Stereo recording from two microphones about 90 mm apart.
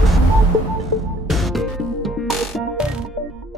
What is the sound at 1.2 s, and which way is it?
Music, centre (ahead or behind).